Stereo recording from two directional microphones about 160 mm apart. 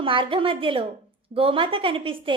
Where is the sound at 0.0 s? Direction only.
35° right (ahead or behind).